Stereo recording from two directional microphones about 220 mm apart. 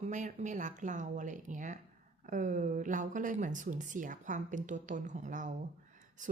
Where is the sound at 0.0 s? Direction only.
35° right (ahead or behind).